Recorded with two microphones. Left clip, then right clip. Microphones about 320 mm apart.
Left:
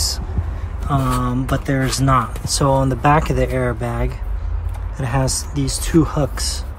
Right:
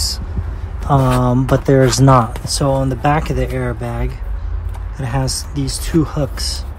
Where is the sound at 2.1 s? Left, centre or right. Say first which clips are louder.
Right 4 dB; centre.